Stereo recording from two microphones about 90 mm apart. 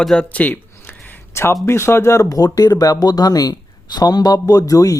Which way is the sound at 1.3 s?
30° left (ahead or behind).